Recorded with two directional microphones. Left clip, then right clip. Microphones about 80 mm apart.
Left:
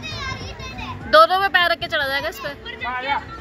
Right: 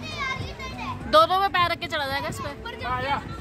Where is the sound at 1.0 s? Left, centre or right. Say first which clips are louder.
Left 5 dB; right; by 2.5 s centre.